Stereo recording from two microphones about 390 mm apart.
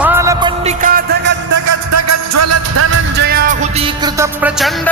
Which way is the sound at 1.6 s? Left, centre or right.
Right.